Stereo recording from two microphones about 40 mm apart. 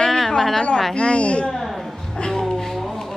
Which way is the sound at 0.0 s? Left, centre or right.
Centre.